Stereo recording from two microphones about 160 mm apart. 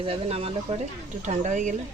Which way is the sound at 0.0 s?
35° right (ahead or behind).